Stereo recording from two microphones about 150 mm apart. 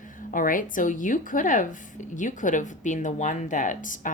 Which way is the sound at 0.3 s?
65° left (ahead or behind).